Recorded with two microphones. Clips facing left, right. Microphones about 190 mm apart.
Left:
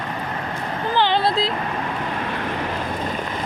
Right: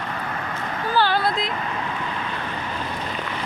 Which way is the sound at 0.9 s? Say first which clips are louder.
Left 2 dB; 20° left (ahead or behind).